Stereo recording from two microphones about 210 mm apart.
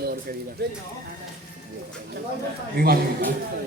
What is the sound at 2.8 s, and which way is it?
Speech, 45° right (ahead or behind).